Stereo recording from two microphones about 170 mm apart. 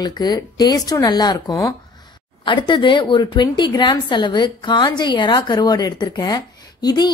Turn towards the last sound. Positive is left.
turn(degrees=25)  # may be behind; listen again after turning